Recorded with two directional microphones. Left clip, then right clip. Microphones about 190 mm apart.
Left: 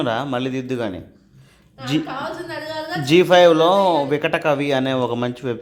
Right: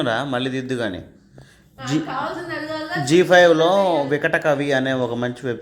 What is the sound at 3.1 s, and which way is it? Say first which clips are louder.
Speech: left 1 dB; 10° left (ahead or behind).